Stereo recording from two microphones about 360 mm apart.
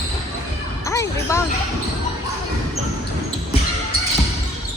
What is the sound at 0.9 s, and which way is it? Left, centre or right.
Speech, centre.